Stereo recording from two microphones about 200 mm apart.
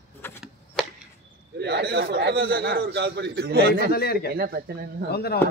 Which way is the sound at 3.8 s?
50° left (ahead or behind).